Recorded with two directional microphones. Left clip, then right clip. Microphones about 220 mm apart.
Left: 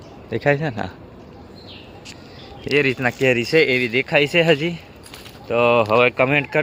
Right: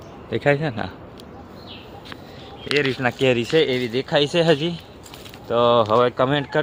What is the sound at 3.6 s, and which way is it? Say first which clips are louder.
Speech: left 3 dB; 40° left (ahead or behind).